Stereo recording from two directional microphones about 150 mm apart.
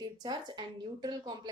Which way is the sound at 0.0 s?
30° right (ahead or behind).